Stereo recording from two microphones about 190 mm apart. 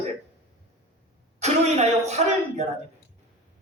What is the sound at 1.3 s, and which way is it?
Speech, 35° right (ahead or behind).